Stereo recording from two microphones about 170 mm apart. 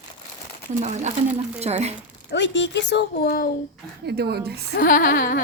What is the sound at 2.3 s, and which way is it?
Speech, 90° left.